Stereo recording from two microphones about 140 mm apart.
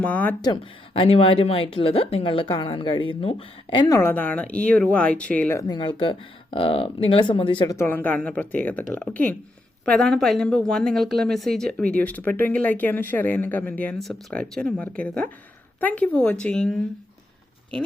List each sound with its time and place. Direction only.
0.0 s a woman's voice: 10° left (ahead or behind)
0.4 s speech: 35° left (ahead or behind)
4.0 s a woman's voice: 15° left (ahead or behind)
5.5 s speech: 30° left (ahead or behind)
7.6 s speech: 25° left (ahead or behind)
7.9 s a woman's voice: 15° left (ahead or behind)